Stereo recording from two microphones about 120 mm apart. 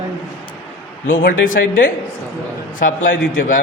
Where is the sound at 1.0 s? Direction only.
90° left.